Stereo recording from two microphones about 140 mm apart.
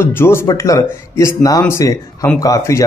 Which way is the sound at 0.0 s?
15° left (ahead or behind).